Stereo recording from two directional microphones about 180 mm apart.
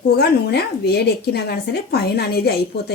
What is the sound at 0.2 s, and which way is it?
Speech, 65° left (ahead or behind).